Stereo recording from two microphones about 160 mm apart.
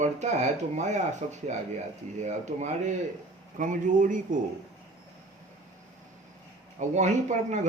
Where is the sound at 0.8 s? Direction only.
45° right (ahead or behind).